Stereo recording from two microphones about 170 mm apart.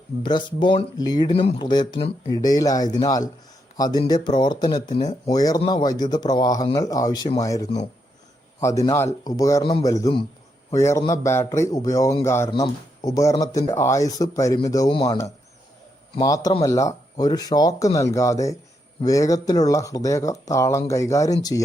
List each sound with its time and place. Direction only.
0.2 s speech: 25° left (ahead or behind)
1.3 s speech: 35° left (ahead or behind)
4.9 s speech: 40° left (ahead or behind)
5.3 s speech: 20° left (ahead or behind)
8.9 s speech: 15° left (ahead or behind)
12.5 s speech: 25° left (ahead or behind)